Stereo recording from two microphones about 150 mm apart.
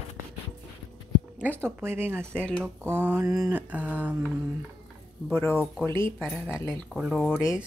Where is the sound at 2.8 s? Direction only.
15° right (ahead or behind).